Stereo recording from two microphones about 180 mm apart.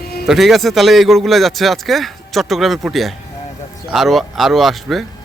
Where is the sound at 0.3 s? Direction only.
Centre (ahead or behind).